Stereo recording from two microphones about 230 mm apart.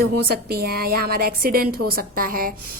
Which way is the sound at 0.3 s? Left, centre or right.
Right.